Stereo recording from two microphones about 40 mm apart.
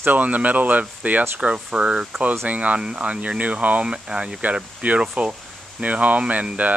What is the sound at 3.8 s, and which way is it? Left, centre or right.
Speech, right.